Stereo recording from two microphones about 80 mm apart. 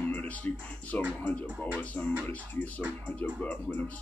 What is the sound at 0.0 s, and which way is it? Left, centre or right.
Music, left.